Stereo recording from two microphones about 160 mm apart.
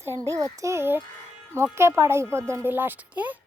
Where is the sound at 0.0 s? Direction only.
20° right (ahead or behind).